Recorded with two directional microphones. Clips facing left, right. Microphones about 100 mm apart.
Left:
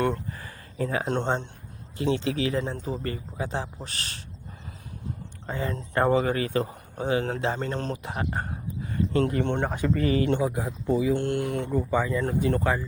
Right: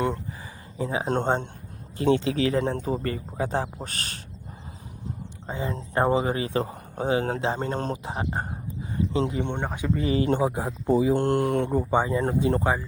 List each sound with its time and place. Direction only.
0.8 s speech: 20° right (ahead or behind)
1.0 s speech: 40° right (ahead or behind)
2.6 s speech: 60° right (ahead or behind)
2.8 s speech: 40° right (ahead or behind)
5.5 s speech: 20° right (ahead or behind); by 8.1 s 40° right (ahead or behind)
8.1 s speech: 25° right (ahead or behind)
8.9 s a sound: 20° right (ahead or behind)
9.4 s speech: 15° right (ahead or behind); by 11.9 s 45° right (ahead or behind)
11.9 s speech: 30° right (ahead or behind)